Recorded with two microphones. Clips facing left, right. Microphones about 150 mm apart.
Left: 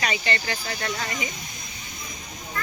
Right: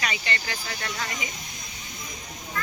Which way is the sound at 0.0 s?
35° left (ahead or behind).